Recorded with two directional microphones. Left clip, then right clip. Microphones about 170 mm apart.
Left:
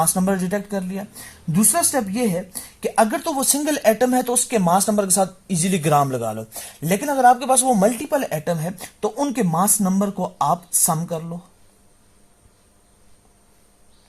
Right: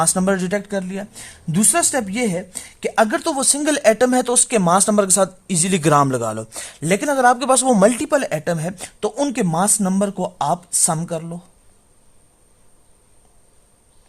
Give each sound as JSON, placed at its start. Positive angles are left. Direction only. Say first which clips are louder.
{"t": 0.0, "sound": "speech", "louder": "right 2 dB", "side_deg": -20}
{"t": 7.9, "sound": "speech", "louder": "right 3 dB", "side_deg": -20}